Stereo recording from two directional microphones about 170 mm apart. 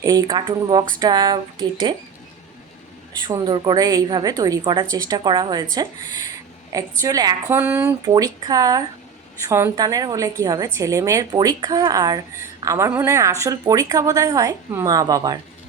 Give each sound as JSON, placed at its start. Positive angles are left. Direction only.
{"t": 0.0, "sound": "speech", "side_deg": -20}
{"t": 3.2, "sound": "speech", "side_deg": -25}
{"t": 7.0, "sound": "speech", "side_deg": -20}